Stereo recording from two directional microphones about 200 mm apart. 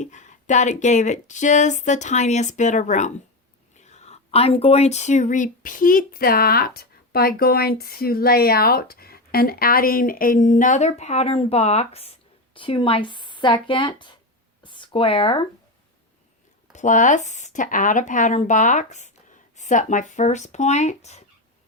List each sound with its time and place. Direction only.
0.0 s speech: 35° left (ahead or behind)
14.6 s a sound: 25° left (ahead or behind)
16.7 s speech: 40° left (ahead or behind)